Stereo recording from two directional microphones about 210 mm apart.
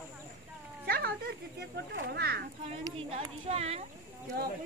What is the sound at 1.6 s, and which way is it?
Speech, 50° right (ahead or behind).